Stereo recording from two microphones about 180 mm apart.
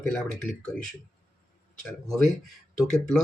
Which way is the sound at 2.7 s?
5° left (ahead or behind).